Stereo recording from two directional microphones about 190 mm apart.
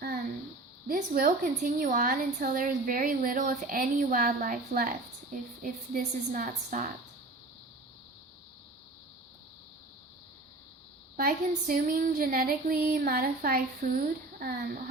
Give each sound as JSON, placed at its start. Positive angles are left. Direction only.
{"t": 0.9, "sound": "a woman's voice", "side_deg": -50}
{"t": 11.2, "sound": "a woman's voice", "side_deg": -50}